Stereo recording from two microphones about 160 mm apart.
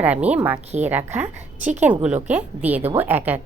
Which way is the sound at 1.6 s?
50° right (ahead or behind).